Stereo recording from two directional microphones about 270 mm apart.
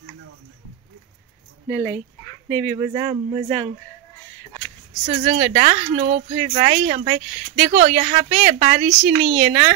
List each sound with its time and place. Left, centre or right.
2.7 s speech: centre
5.0 s speech: right